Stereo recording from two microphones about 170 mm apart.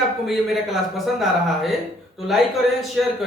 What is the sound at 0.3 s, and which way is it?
A man's voice, centre (ahead or behind).